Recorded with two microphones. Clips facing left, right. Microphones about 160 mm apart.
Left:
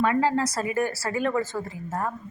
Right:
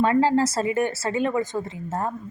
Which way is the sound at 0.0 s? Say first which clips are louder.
Right 3 dB; 30° right (ahead or behind).